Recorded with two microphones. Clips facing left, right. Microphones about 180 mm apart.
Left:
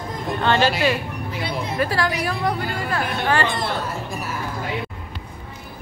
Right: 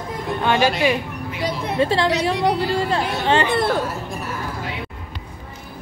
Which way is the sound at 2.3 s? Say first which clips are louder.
Right 4 dB; 75° right (ahead or behind).